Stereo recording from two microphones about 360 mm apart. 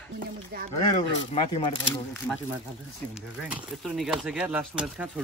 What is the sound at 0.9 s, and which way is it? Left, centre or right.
Speech, centre.